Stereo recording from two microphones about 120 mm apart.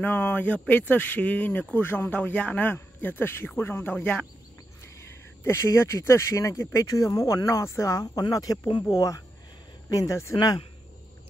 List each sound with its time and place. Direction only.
0.0 s speech: 15° left (ahead or behind)
10.3 s speech: 40° left (ahead or behind)